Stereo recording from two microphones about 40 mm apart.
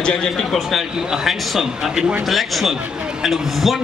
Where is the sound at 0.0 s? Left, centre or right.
Left.